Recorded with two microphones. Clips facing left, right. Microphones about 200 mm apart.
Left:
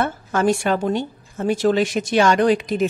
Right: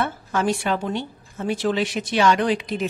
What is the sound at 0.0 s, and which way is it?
A woman's voice, 45° left (ahead or behind).